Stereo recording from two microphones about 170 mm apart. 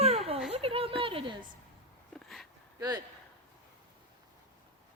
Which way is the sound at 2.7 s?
20° right (ahead or behind).